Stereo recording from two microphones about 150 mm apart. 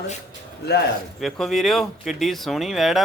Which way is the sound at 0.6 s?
90° left.